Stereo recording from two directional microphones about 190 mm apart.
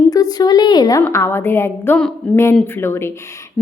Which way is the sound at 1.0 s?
15° left (ahead or behind).